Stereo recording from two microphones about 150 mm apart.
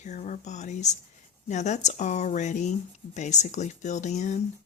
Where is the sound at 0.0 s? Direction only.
55° left (ahead or behind).